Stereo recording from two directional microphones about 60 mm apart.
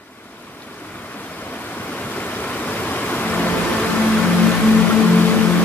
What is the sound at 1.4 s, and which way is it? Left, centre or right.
Waves, left.